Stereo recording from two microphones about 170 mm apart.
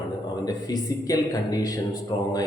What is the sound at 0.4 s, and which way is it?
Speech, 20° left (ahead or behind).